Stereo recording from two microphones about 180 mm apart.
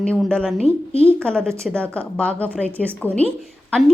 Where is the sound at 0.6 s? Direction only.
35° left (ahead or behind).